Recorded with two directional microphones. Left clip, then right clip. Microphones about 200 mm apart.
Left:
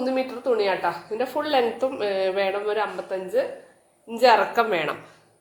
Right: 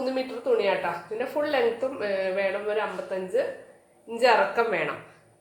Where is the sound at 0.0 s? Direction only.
35° left (ahead or behind).